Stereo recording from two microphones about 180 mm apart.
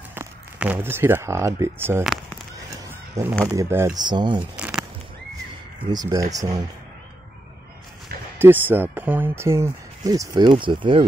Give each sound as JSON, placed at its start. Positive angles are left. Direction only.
{"t": 0.1, "sound": "speech", "side_deg": -10}
{"t": 2.8, "sound": "a sound", "side_deg": -15}
{"t": 3.4, "sound": "speech", "side_deg": -15}
{"t": 4.4, "sound": "a sound", "side_deg": -5}
{"t": 5.9, "sound": "speech", "side_deg": -20}
{"t": 8.4, "sound": "speech", "side_deg": -10}